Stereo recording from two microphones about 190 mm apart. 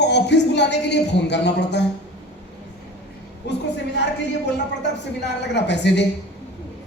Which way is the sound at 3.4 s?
65° left (ahead or behind).